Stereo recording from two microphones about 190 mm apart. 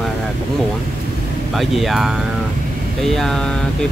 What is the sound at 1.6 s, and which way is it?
Speech, centre (ahead or behind).